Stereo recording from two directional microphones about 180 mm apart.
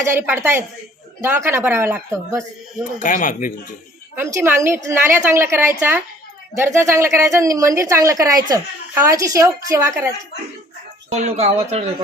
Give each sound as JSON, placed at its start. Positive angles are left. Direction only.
{"t": 0.0, "sound": "a woman's voice", "side_deg": -15}
{"t": 3.0, "sound": "speech", "side_deg": 45}
{"t": 4.1, "sound": "a woman's voice", "side_deg": -15}
{"t": 11.1, "sound": "speech", "side_deg": -40}